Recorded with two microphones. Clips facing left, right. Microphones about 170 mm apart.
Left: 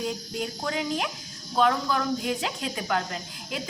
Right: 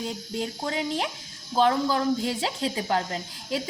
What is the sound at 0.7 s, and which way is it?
Speech, 35° right (ahead or behind).